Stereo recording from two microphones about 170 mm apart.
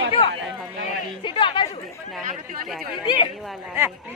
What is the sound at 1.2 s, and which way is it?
Chatter, 30° left (ahead or behind).